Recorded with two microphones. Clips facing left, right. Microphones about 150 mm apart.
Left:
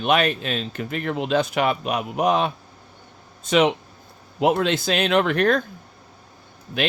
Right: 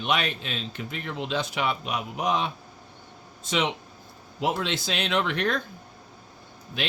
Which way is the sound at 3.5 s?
55° left (ahead or behind).